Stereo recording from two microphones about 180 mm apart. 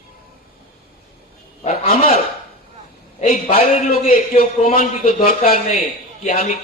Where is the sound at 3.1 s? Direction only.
35° left (ahead or behind).